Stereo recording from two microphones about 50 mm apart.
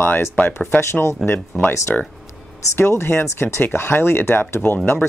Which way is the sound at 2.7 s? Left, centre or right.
Left.